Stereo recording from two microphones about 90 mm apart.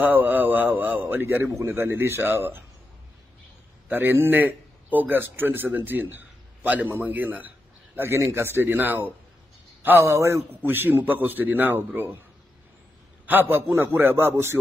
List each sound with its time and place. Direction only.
0.0 s a man's voice: 20° right (ahead or behind)
3.9 s a man's voice: 25° right (ahead or behind)
10.6 s a man's voice: 20° right (ahead or behind)
13.3 s a man's voice: 25° right (ahead or behind)